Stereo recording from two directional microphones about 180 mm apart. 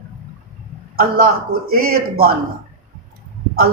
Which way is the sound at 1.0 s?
55° right (ahead or behind).